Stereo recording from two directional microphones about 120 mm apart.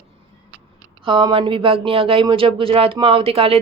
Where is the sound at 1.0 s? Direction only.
45° right (ahead or behind).